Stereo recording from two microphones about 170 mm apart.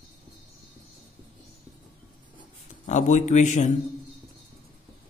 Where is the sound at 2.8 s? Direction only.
45° left (ahead or behind).